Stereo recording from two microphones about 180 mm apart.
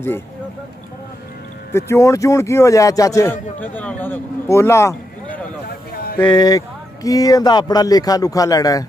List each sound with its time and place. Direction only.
1.7 s speech: 15° left (ahead or behind)
5.7 s a sound: 60° left (ahead or behind)
6.2 s speech: 25° left (ahead or behind)